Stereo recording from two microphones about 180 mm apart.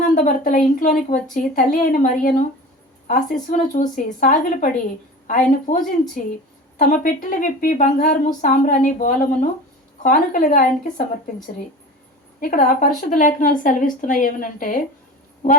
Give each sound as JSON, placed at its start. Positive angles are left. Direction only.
{"t": 0.1, "sound": "a woman's voice", "side_deg": 45}
{"t": 12.4, "sound": "a woman's voice", "side_deg": 50}